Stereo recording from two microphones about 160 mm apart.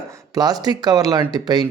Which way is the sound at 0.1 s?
25° right (ahead or behind).